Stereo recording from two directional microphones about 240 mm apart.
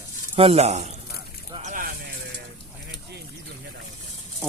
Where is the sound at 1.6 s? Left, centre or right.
Right.